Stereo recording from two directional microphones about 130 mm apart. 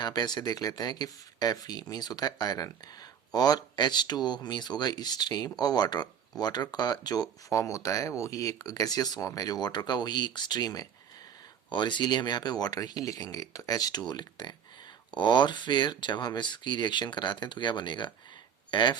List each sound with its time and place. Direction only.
0.0 s speech: 30° left (ahead or behind)